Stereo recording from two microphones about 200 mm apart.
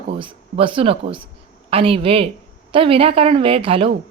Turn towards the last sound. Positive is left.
turn(degrees=-25)  # may be behind; listen again after turning